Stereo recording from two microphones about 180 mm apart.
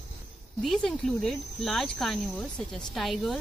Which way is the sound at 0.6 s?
Centre (ahead or behind).